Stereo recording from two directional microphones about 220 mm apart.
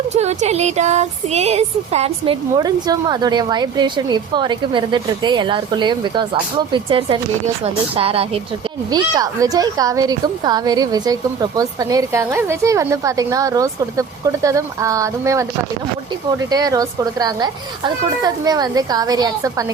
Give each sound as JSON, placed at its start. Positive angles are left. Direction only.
{"t": 0.1, "sound": "a woman's voice", "side_deg": -30}